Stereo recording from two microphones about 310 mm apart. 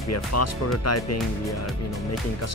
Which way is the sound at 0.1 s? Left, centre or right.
Left.